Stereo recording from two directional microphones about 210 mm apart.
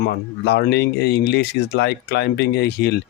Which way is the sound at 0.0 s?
50° left (ahead or behind).